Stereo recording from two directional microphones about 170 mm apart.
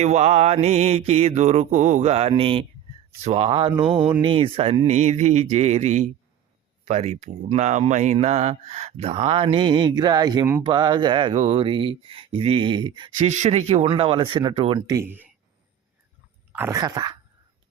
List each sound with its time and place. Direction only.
0.0 s speech: 40° right (ahead or behind)
3.8 s a sound: 5° right (ahead or behind)
4.2 s speech: 30° right (ahead or behind)
13.2 s speech: 40° right (ahead or behind)
14.9 s a sound: 10° right (ahead or behind)
16.5 s speech: 15° right (ahead or behind)